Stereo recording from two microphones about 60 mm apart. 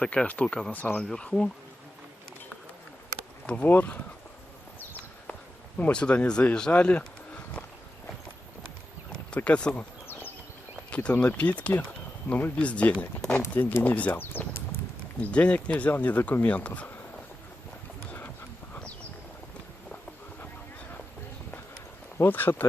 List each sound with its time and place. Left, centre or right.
0.0 s speech: centre
0.7 s speech: left
0.9 s speech: centre
3.4 s speech: left
5.3 s speech: left
9.3 s speech: left
10.9 s speech: centre
14.1 s speech: left
15.2 s speech: left
22.2 s speech: left